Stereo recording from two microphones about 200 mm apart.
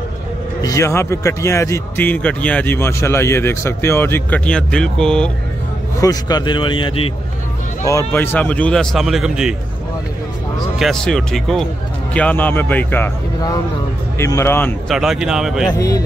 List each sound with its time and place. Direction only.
0.6 s a man's voice: 15° left (ahead or behind)
5.9 s a man's voice: 20° left (ahead or behind)
7.8 s a man's voice: 10° left (ahead or behind); by 9.6 s 5° right (ahead or behind)
10.8 s a man's voice: centre (ahead or behind)
14.9 s speech: centre (ahead or behind)